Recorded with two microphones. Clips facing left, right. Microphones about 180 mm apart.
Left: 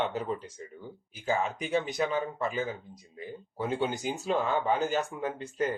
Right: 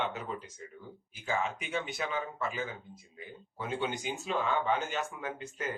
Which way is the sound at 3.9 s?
35° left (ahead or behind).